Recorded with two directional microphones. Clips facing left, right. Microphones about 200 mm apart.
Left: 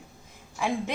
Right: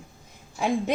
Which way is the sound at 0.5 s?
40° right (ahead or behind).